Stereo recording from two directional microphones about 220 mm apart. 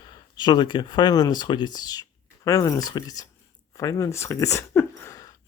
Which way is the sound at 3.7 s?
15° left (ahead or behind).